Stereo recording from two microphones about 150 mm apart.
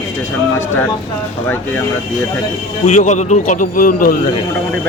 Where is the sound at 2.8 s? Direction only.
55° left (ahead or behind); by 4.2 s 70° left (ahead or behind).